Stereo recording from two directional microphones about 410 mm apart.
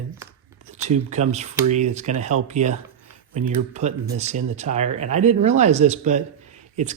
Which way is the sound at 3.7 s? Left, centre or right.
Centre.